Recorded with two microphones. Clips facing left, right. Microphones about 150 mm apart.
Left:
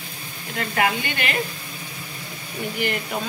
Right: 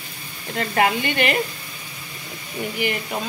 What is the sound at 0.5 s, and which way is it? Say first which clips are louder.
Sizzle: right 3 dB; 30° right (ahead or behind).